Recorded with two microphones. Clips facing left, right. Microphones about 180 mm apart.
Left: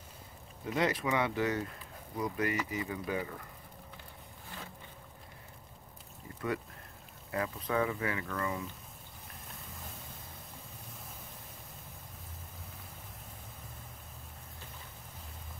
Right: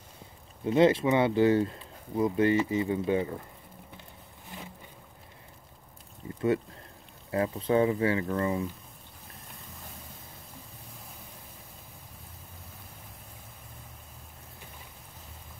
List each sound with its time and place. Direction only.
0.7 s speech: 25° right (ahead or behind)
6.2 s a sound: 25° right (ahead or behind)
7.2 s speech: 30° right (ahead or behind)